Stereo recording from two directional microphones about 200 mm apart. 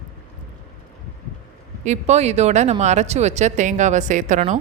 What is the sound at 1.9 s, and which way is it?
Speech, 35° right (ahead or behind).